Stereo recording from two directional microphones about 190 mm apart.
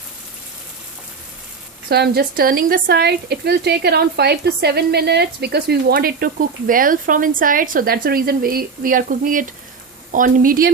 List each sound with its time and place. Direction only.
1.9 s speech: 55° right (ahead or behind)